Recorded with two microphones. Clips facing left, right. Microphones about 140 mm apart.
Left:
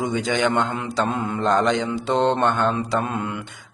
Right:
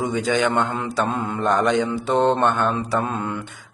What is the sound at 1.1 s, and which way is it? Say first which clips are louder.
Mantra: even; 15° right (ahead or behind).